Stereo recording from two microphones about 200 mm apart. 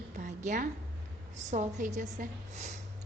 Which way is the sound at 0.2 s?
40° right (ahead or behind).